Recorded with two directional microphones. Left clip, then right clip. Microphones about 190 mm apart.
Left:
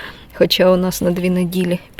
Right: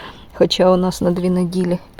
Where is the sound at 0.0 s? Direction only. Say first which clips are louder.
Left 1 dB; 10° right (ahead or behind).